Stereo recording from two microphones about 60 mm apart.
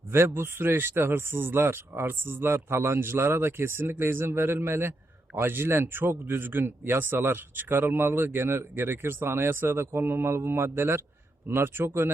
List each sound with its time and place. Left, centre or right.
0.1 s speech: right